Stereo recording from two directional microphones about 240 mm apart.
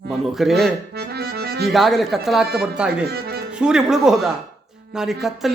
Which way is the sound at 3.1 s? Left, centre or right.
Right.